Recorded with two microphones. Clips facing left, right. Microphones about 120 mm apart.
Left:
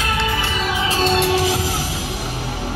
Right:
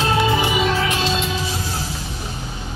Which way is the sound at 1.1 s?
70° left (ahead or behind).